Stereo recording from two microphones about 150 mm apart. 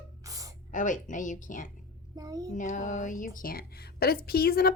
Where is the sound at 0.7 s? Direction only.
60° left (ahead or behind).